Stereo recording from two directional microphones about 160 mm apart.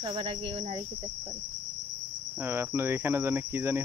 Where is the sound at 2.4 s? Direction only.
15° right (ahead or behind).